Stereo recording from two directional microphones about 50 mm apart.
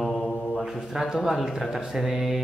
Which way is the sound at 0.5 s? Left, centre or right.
Centre.